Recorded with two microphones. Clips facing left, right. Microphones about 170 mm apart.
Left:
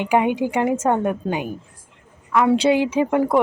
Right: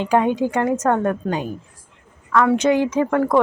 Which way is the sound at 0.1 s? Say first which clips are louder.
Right 1 dB; 10° left (ahead or behind).